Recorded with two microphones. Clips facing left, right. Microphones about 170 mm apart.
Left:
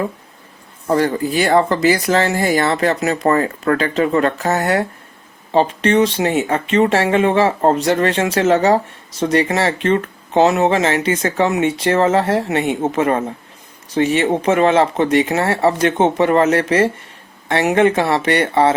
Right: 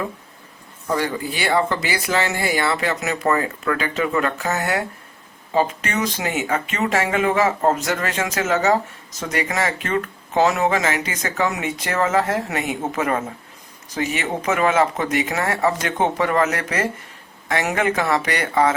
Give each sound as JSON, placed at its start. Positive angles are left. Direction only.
{"t": 0.9, "sound": "speech", "side_deg": 45}